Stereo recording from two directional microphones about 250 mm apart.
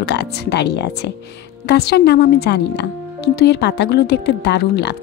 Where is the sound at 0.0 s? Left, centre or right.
Left.